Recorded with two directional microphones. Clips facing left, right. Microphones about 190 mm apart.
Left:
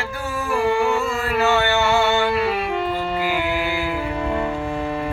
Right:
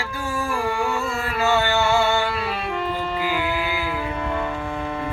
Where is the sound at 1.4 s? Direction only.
15° right (ahead or behind).